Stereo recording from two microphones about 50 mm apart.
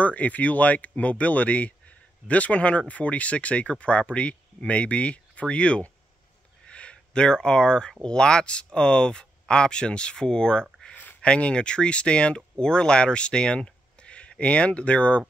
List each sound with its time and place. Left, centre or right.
0.0 s speech: left
6.6 s a sound: left
8.0 s speech: centre